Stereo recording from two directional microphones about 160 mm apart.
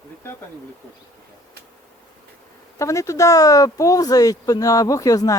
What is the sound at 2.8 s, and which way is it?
Speech, 20° left (ahead or behind).